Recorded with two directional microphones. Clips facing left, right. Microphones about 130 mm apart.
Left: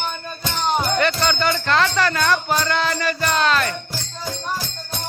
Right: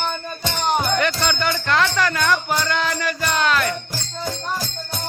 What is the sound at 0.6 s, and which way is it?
Music, 10° right (ahead or behind).